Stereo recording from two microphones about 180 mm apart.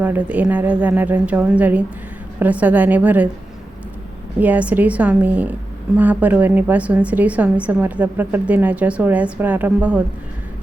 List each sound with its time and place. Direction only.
0.0 s a woman's voice: 10° right (ahead or behind)
4.4 s a woman's voice: 10° right (ahead or behind)